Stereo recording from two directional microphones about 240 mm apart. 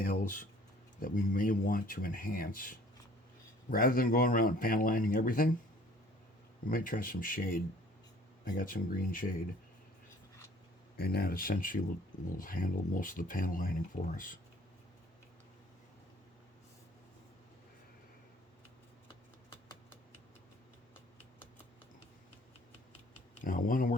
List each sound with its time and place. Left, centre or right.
0.0 s a sound: left
0.9 s speech: left
6.7 s speech: left
10.9 s speech: left
23.4 s speech: left